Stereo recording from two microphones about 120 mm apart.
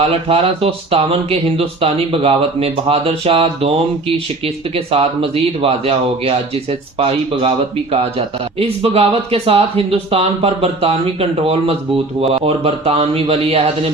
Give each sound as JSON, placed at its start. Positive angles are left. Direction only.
{"t": 0.0, "sound": "speech", "side_deg": -50}